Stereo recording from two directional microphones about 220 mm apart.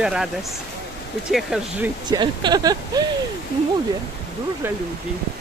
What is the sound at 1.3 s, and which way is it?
Speech, centre (ahead or behind).